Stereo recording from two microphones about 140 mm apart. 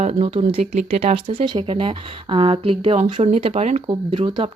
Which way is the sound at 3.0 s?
55° right (ahead or behind).